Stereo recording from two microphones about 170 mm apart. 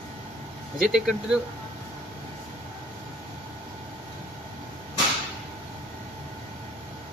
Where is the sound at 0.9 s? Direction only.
5° right (ahead or behind).